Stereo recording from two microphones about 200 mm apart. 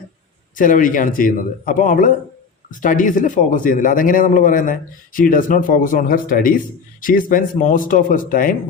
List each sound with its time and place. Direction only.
0.5 s a man's voice: 40° left (ahead or behind)